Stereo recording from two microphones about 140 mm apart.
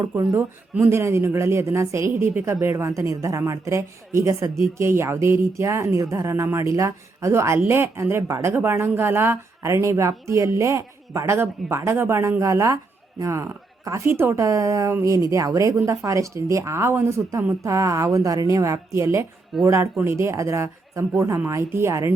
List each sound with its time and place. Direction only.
0.2 s a woman's voice: 25° right (ahead or behind)